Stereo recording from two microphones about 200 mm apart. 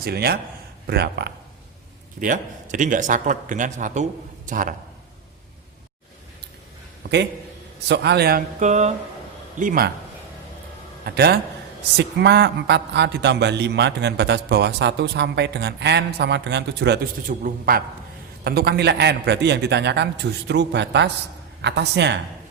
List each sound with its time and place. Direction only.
0.0 s speech: 50° right (ahead or behind)
2.2 s a man's voice: 40° right (ahead or behind)
7.9 s speech: 55° right (ahead or behind)
11.0 s a man's voice: 55° right (ahead or behind)
17.2 s speech: 45° right (ahead or behind)